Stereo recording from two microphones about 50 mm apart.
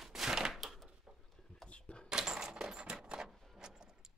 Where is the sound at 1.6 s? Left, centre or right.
Left.